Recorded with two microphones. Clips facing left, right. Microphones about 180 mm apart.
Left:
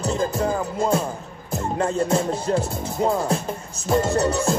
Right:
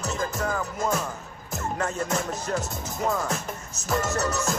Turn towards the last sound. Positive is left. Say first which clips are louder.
# left 6 dB
turn(degrees=30)  # may be behind; listen again after turning